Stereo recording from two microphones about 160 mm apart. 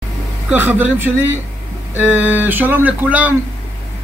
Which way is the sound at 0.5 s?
10° right (ahead or behind).